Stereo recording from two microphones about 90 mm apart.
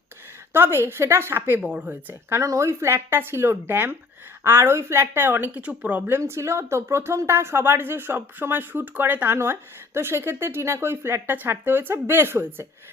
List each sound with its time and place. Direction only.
0.5 s speech: 25° right (ahead or behind)
2.4 s speech: 35° right (ahead or behind); by 6.1 s 15° right (ahead or behind)
6.1 s speech: 25° right (ahead or behind)